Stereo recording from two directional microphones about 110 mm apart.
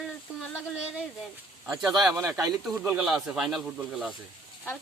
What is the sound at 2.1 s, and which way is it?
Speech, 25° right (ahead or behind).